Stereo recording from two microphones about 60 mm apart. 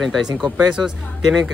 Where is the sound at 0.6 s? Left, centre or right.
Centre.